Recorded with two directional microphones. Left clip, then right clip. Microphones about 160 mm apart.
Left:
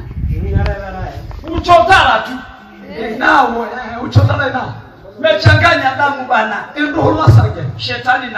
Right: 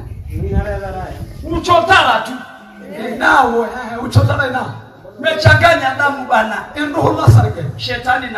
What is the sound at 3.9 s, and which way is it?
A man's voice, 70° right (ahead or behind).